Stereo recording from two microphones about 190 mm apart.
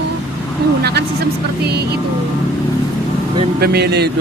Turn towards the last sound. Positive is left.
turn(degrees=-60)  # may be behind; listen again after turning